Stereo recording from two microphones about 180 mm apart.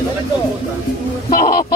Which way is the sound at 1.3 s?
55° left (ahead or behind).